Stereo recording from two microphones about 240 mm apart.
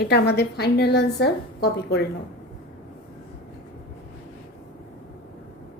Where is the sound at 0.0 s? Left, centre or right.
Left.